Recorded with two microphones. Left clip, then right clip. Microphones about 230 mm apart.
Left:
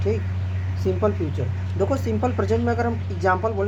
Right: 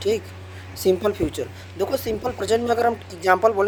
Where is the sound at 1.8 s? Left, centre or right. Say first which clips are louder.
Even; right.